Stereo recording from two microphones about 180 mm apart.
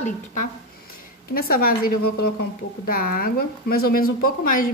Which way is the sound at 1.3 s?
55° left (ahead or behind).